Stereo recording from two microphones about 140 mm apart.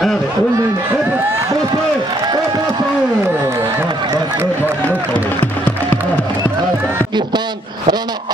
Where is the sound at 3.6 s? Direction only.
30° right (ahead or behind).